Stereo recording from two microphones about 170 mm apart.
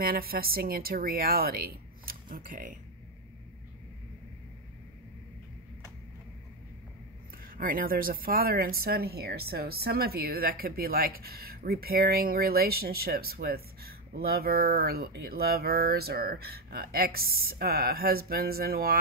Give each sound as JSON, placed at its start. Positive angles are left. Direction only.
{"t": 0.0, "sound": "speech", "side_deg": -60}
{"t": 7.4, "sound": "speech", "side_deg": -55}